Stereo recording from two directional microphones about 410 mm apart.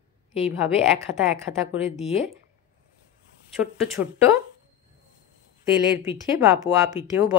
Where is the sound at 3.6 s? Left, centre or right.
Centre.